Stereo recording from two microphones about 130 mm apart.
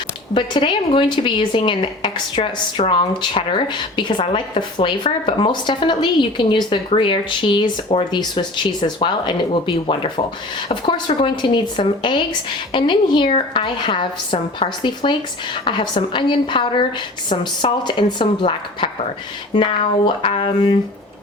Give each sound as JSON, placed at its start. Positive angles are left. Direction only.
{"t": 0.3, "sound": "speech", "side_deg": 40}
{"t": 20.2, "sound": "speech", "side_deg": 45}